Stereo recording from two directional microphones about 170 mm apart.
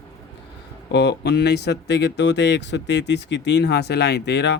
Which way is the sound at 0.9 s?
90° left.